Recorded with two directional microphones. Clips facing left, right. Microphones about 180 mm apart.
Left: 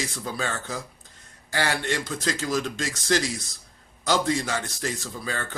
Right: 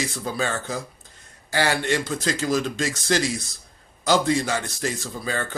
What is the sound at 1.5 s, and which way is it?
Speech, 30° right (ahead or behind).